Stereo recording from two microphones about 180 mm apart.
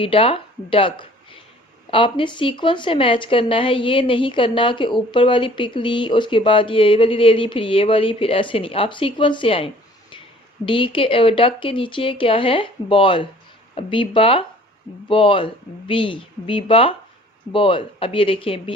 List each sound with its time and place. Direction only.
0.0 s speech: 30° left (ahead or behind)
10.7 s speech: 30° left (ahead or behind)